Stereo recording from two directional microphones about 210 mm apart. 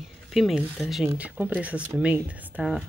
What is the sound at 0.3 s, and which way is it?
Speech, centre (ahead or behind).